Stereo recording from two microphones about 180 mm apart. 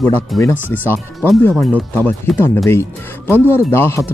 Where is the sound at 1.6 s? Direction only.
10° left (ahead or behind).